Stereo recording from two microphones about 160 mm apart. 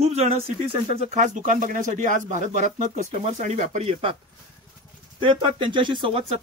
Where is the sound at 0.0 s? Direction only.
40° right (ahead or behind).